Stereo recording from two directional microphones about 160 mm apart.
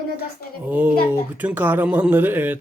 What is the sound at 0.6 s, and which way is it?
Speech, 10° right (ahead or behind).